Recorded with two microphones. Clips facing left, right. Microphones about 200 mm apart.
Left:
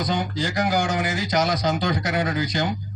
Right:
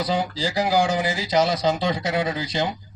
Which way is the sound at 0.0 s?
30° right (ahead or behind).